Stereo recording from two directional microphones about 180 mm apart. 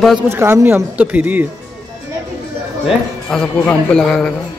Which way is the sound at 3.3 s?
5° left (ahead or behind).